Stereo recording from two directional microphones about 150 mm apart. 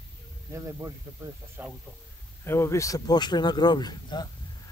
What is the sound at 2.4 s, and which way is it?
Speech, 15° left (ahead or behind).